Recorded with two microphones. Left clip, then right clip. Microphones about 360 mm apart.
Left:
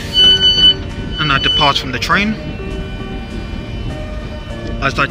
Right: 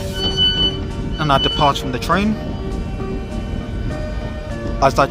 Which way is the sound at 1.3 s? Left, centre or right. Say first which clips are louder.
Left 3 dB; centre.